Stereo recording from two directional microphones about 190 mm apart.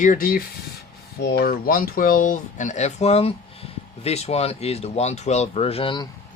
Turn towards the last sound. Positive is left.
turn(degrees=25)  # may be behind; listen again after turning